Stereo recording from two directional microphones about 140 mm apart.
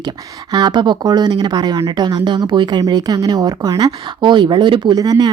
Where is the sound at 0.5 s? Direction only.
30° right (ahead or behind).